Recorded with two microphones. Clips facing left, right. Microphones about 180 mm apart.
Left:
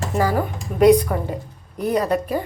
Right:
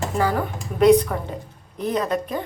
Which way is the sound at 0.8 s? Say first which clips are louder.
Left 1 dB; 10° left (ahead or behind).